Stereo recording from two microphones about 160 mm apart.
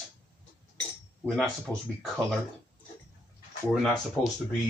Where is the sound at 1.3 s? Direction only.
5° left (ahead or behind).